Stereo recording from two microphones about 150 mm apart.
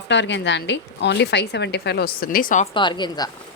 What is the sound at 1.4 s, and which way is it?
Speech, 90° left.